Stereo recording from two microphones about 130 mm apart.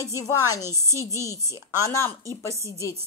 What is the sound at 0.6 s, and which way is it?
Speech, 20° right (ahead or behind).